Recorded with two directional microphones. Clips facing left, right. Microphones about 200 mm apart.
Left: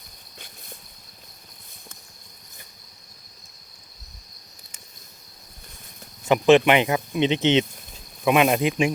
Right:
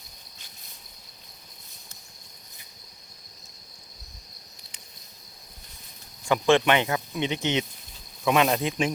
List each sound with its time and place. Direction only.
6.2 s speech: 20° left (ahead or behind)